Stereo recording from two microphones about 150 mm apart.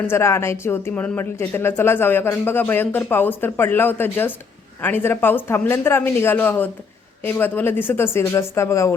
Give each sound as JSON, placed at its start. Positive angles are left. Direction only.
{"t": 0.1, "sound": "speech", "side_deg": 15}